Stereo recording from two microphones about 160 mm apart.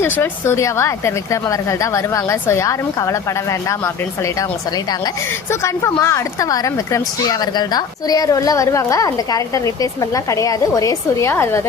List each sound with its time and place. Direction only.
0.0 s a woman's voice: 15° left (ahead or behind)
5.5 s a woman's voice: 15° left (ahead or behind)